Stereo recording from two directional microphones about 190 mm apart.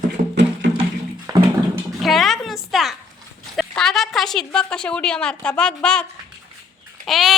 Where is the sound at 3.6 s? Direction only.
Centre (ahead or behind).